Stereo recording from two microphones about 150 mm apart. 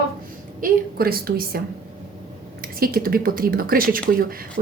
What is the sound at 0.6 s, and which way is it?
A woman's voice, 75° right (ahead or behind).